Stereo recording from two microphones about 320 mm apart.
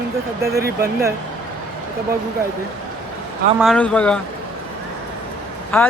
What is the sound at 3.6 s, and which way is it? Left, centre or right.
Speech, centre.